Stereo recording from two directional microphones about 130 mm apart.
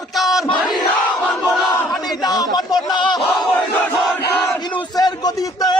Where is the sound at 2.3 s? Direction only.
30° left (ahead or behind).